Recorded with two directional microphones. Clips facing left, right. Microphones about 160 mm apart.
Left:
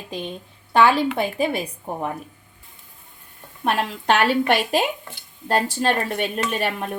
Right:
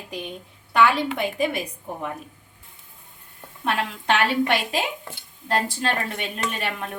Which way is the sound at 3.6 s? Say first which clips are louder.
Left 3 dB; 40° left (ahead or behind).